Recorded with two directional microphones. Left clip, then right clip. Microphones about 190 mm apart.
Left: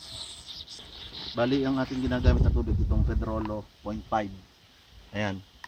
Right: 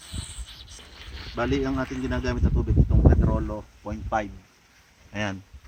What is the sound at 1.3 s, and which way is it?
Speech, 20° left (ahead or behind).